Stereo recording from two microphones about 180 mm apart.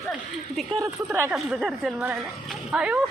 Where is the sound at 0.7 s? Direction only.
15° right (ahead or behind).